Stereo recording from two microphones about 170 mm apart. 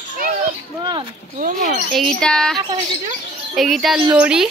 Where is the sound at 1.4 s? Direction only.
50° right (ahead or behind).